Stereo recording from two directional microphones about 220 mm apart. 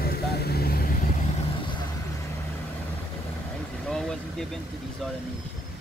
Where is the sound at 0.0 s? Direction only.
45° left (ahead or behind).